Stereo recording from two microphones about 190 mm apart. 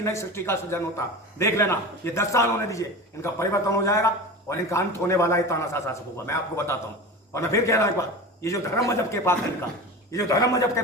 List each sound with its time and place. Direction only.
0.0 s a man's voice: 15° left (ahead or behind)